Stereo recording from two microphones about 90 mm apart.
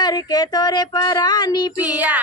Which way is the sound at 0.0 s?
45° left (ahead or behind).